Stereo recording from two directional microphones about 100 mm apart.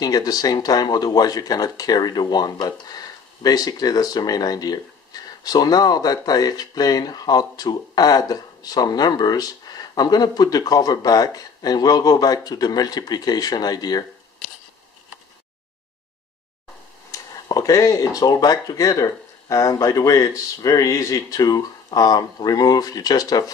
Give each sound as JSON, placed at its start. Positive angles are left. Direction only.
{"t": 0.0, "sound": "speech", "side_deg": 40}
{"t": 17.1, "sound": "speech", "side_deg": 35}